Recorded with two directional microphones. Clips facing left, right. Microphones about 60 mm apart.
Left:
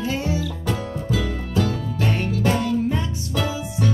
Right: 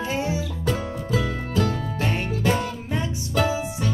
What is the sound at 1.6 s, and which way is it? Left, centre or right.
Music, right.